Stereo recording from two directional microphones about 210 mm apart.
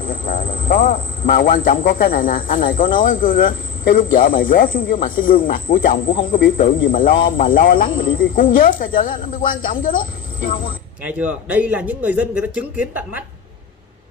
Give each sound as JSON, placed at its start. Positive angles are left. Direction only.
{"t": 0.0, "sound": "a man's voice", "side_deg": 40}
{"t": 11.1, "sound": "a man's voice", "side_deg": -5}